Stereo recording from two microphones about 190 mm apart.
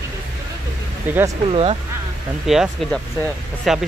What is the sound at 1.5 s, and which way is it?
Speech, 30° right (ahead or behind).